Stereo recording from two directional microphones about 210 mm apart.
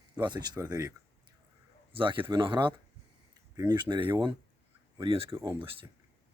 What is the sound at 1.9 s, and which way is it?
Speech, 25° right (ahead or behind).